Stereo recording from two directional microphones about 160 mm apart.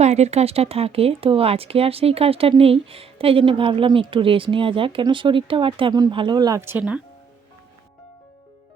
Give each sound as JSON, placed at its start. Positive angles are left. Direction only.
{"t": 0.0, "sound": "speech", "side_deg": -45}